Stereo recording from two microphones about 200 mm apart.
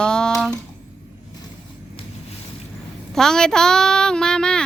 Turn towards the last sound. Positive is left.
turn(degrees=5)  # may be behind; listen again after turning